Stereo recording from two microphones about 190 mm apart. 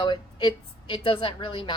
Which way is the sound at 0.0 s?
25° left (ahead or behind).